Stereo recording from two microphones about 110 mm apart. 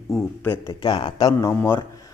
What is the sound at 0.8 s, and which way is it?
Speech, 40° left (ahead or behind).